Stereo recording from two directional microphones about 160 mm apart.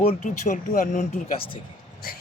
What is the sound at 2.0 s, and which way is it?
Speech, 70° left (ahead or behind).